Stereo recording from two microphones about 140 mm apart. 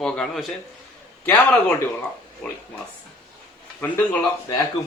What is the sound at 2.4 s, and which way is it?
Speech, 10° left (ahead or behind).